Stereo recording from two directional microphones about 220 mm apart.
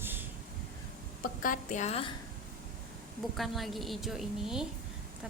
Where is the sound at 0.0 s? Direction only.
10° right (ahead or behind).